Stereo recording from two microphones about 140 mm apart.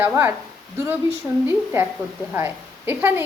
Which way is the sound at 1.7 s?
15° right (ahead or behind).